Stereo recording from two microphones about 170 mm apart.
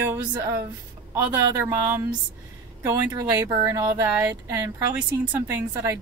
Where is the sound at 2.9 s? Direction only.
20° right (ahead or behind).